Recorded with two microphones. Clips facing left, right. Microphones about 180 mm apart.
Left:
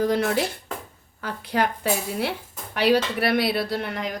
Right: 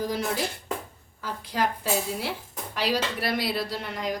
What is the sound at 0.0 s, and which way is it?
A woman's voice, 65° left (ahead or behind).